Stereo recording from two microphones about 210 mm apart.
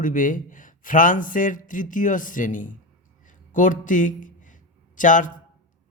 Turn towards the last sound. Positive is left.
turn(degrees=40)  # may be behind; listen again after turning